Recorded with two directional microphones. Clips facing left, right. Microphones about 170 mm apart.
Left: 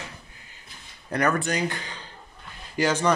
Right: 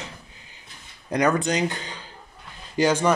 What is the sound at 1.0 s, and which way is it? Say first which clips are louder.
Speech: right 3 dB; 15° right (ahead or behind).